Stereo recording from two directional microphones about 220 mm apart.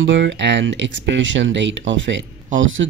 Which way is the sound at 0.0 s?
55° right (ahead or behind).